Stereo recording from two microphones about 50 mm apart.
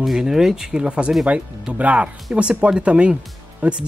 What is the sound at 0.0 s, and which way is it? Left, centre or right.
Speech, centre.